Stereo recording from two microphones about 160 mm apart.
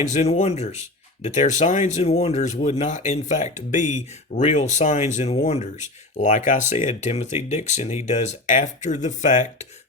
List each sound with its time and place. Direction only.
0.1 s speech: 45° left (ahead or behind)